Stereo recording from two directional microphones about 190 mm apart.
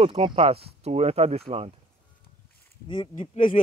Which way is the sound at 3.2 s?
45° left (ahead or behind).